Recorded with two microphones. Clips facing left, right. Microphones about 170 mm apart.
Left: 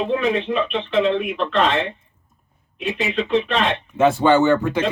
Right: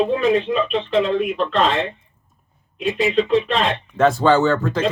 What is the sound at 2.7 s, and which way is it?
Speech, 40° right (ahead or behind).